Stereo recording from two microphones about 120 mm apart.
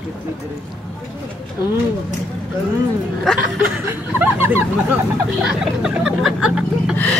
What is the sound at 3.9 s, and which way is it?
Speech, 20° right (ahead or behind).